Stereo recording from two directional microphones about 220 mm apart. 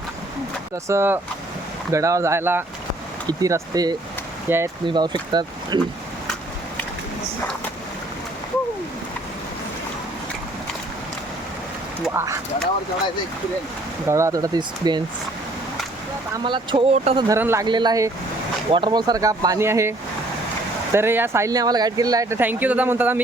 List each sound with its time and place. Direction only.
0.9 s speech: 10° right (ahead or behind)
12.0 s speech: 10° right (ahead or behind)
14.1 s speech: 15° right (ahead or behind)
16.4 s speech: 20° right (ahead or behind)
17.2 s speech: 10° right (ahead or behind)
20.9 s speech: 10° right (ahead or behind)